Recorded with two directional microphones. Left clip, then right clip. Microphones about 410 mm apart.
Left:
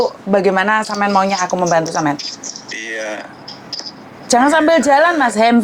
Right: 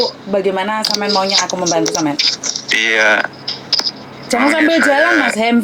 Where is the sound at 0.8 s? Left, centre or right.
Right.